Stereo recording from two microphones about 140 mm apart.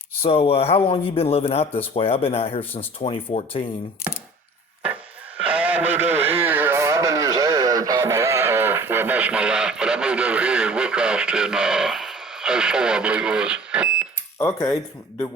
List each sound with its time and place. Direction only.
0.3 s speech: 45° left (ahead or behind)
5.4 s radio: 10° right (ahead or behind)
14.3 s speech: 20° left (ahead or behind)